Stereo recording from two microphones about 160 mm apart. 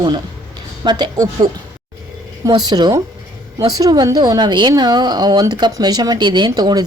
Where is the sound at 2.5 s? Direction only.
25° right (ahead or behind).